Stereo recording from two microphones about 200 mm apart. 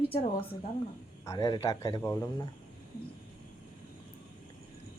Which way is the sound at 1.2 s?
15° left (ahead or behind).